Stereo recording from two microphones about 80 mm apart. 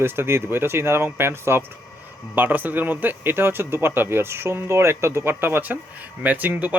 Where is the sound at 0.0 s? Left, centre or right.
Right.